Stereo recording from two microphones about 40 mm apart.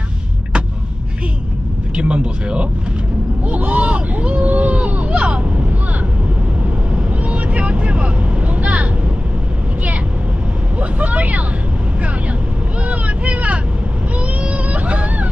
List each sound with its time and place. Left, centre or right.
2.0 s speech: right
3.4 s hubbub: right
7.1 s vehicle: right
10.8 s vehicle: right
12.8 s vehicle: right